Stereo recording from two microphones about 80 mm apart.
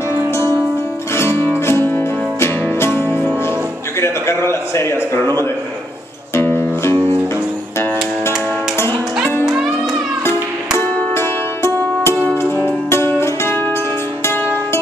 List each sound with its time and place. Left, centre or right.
1.1 s music: left
4.0 s a man's voice: left
6.3 s music: left
11.1 s music: left